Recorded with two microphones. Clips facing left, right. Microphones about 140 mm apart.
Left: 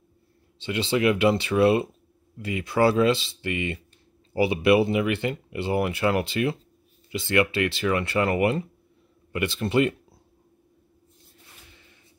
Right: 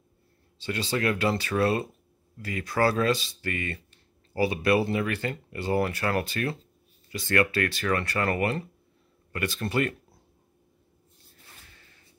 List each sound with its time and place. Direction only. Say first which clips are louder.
0.6 s speech: left 5 dB; 20° left (ahead or behind)